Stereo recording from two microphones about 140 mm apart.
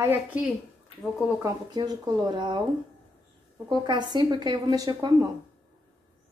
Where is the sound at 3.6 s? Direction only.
30° right (ahead or behind).